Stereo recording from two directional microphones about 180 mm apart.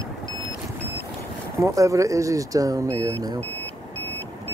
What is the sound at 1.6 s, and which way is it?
Speech, 15° right (ahead or behind).